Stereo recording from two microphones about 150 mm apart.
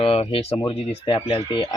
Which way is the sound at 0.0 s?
40° left (ahead or behind).